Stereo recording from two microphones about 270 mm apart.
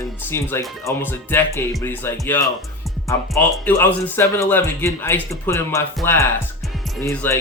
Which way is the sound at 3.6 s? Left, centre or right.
Centre.